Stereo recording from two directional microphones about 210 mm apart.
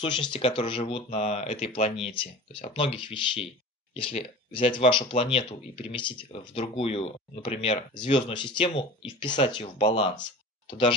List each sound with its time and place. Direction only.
0.0 s speech: 25° left (ahead or behind)